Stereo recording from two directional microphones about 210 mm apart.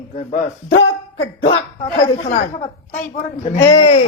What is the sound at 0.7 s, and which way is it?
Speech, 65° left (ahead or behind).